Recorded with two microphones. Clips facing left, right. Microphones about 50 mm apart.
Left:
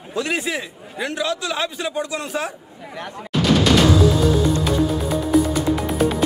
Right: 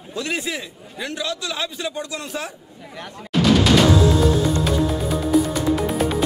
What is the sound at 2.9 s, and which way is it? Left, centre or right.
Speech, left.